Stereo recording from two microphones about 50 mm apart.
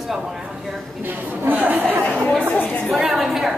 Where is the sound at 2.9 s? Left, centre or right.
Centre.